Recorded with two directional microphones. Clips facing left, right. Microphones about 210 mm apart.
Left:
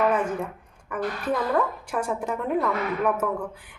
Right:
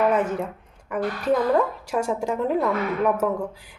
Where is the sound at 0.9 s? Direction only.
25° right (ahead or behind).